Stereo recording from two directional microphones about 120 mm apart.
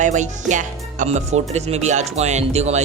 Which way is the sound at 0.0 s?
90° right.